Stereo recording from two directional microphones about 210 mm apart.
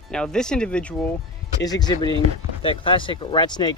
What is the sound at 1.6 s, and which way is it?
Speech, 20° left (ahead or behind).